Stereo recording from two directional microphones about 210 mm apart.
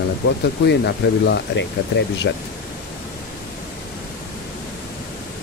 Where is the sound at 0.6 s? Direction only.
55° left (ahead or behind).